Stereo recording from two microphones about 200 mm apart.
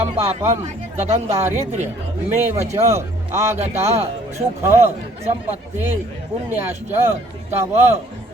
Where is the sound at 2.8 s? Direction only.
30° right (ahead or behind).